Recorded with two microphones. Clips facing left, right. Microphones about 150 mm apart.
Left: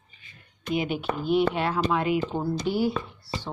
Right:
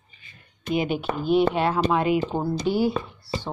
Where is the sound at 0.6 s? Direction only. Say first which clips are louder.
Right 2 dB; 35° right (ahead or behind).